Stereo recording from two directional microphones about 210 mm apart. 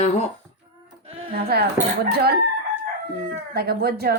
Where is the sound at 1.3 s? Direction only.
50° right (ahead or behind).